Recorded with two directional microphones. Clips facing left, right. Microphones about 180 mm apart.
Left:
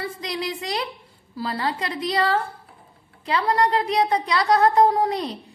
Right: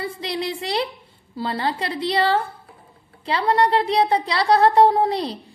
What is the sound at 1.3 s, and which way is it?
A woman's voice, 30° right (ahead or behind).